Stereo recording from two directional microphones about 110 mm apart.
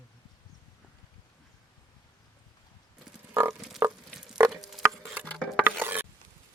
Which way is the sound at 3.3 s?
25° right (ahead or behind).